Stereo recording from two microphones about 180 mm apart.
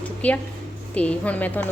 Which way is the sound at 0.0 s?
10° left (ahead or behind).